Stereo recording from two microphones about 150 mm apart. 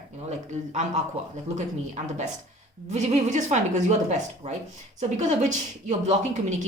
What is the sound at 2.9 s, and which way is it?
A woman's voice, 50° right (ahead or behind).